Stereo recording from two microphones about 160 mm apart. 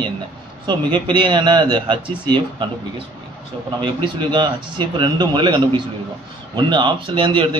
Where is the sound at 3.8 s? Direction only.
30° right (ahead or behind).